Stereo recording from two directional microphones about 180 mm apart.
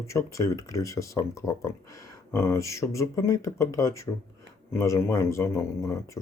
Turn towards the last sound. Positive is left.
turn(degrees=15)  # may be behind; listen again after turning